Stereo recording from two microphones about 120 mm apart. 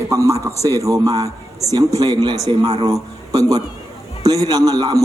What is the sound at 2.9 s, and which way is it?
A man's voice, 30° right (ahead or behind).